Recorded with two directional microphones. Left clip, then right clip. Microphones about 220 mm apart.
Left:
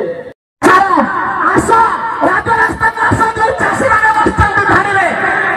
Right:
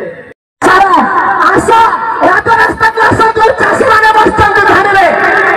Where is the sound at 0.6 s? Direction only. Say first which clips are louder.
Right 3 dB; 35° right (ahead or behind).